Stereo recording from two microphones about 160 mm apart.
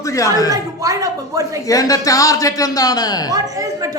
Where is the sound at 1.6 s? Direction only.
20° left (ahead or behind).